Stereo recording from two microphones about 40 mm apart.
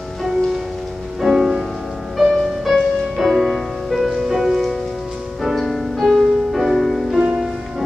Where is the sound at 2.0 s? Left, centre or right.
Centre.